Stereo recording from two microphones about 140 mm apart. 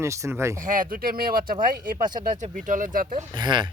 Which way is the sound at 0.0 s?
20° right (ahead or behind).